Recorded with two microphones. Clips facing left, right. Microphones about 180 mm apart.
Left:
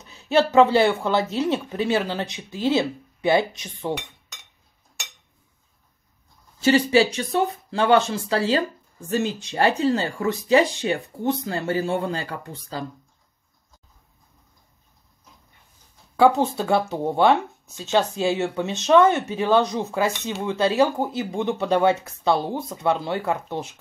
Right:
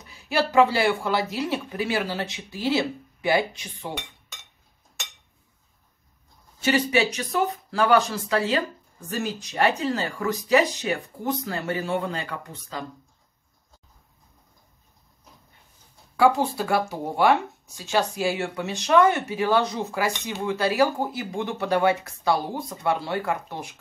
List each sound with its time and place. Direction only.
0.0 s speech: 25° left (ahead or behind)
6.6 s speech: 30° left (ahead or behind)
16.2 s speech: 25° left (ahead or behind)